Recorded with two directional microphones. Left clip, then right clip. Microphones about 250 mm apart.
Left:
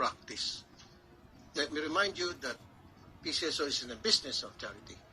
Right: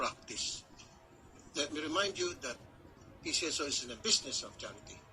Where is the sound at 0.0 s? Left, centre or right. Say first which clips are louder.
Left 3 dB; left.